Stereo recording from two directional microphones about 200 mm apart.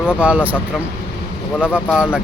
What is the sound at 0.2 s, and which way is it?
Speech, 5° right (ahead or behind).